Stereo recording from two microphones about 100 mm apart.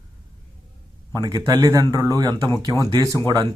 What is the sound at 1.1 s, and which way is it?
Speech, 40° right (ahead or behind).